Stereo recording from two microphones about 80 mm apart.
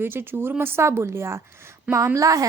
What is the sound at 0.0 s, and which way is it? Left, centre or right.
A woman's voice, right.